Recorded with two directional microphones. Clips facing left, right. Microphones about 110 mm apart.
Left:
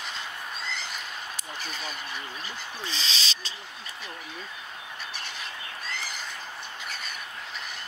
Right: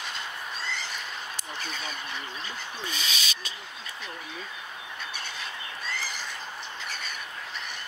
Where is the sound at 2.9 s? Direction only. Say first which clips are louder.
Left 1 dB; 30° left (ahead or behind).